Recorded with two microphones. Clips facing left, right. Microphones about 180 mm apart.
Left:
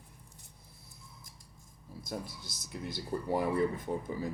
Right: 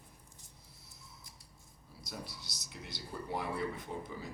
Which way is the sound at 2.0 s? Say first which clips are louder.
Left 6 dB; 50° left (ahead or behind).